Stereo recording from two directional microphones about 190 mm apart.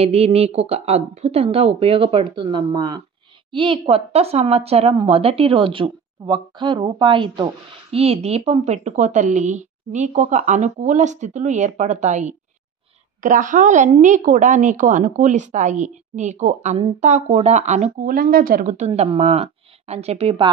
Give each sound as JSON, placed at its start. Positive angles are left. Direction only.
{"t": 0.0, "sound": "a woman's voice", "side_deg": -30}